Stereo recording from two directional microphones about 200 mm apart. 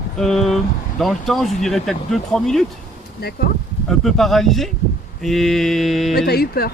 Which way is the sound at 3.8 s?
Centre (ahead or behind).